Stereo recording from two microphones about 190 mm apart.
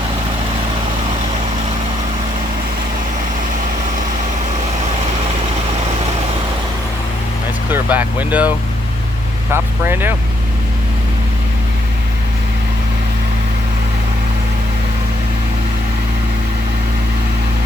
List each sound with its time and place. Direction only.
7.7 s speech: 10° right (ahead or behind)